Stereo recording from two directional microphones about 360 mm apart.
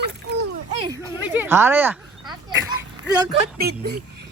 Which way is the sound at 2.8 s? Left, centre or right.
Centre.